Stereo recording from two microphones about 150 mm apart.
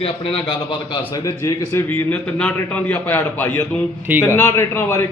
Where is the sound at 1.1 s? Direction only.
25° left (ahead or behind).